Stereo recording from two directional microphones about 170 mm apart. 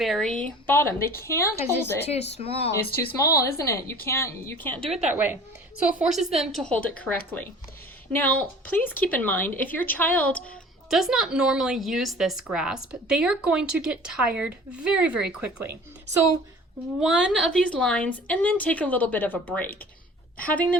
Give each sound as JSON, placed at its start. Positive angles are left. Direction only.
{"t": 0.0, "sound": "a woman's voice", "side_deg": 0}
{"t": 2.0, "sound": "speech", "side_deg": 40}
{"t": 3.2, "sound": "speech", "side_deg": 15}
{"t": 5.1, "sound": "a woman's voice", "side_deg": -10}
{"t": 10.8, "sound": "a woman's voice", "side_deg": 0}
{"t": 17.0, "sound": "speech", "side_deg": -5}